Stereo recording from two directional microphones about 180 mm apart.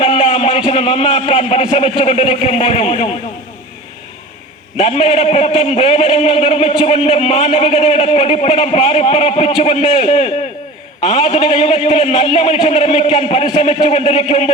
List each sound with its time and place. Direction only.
0.0 s a man's voice: 30° left (ahead or behind)
4.8 s a man's voice: 30° left (ahead or behind)